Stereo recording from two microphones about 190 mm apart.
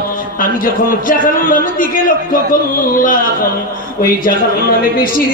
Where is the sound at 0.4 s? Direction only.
45° left (ahead or behind).